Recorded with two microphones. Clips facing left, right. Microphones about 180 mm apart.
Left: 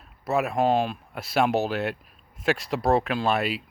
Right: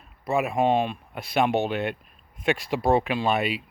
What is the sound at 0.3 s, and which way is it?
Speech, centre (ahead or behind).